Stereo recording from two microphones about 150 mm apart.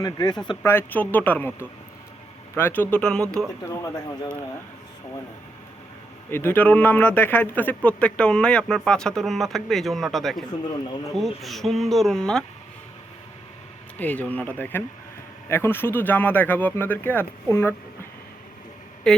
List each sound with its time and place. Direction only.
0.0 s speech: 25° left (ahead or behind)
0.6 s speech: 15° left (ahead or behind)
6.3 s speech: 15° left (ahead or behind)
14.0 s speech: 10° left (ahead or behind)
19.1 s speech: 5° left (ahead or behind)